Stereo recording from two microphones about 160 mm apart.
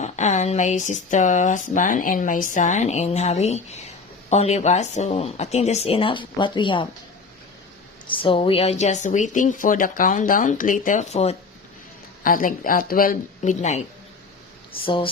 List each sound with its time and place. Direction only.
0.0 s speech: 45° left (ahead or behind); by 6.8 s 30° left (ahead or behind)
8.0 s speech: 35° left (ahead or behind)
12.2 s speech: 60° left (ahead or behind)
14.8 s speech: 35° left (ahead or behind)